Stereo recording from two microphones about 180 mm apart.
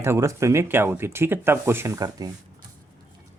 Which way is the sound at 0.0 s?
15° right (ahead or behind).